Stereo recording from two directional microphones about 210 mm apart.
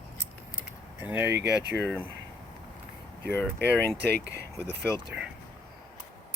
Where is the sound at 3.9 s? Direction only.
55° right (ahead or behind).